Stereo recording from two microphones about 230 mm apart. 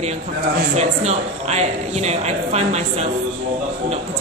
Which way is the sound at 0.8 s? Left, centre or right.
Right.